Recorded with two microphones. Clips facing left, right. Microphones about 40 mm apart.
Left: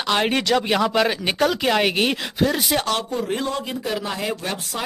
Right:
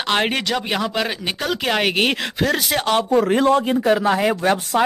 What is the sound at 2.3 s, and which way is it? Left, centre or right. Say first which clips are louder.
Speech: right 1 dB; right.